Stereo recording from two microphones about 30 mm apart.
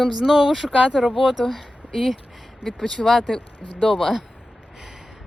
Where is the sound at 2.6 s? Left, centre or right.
Centre.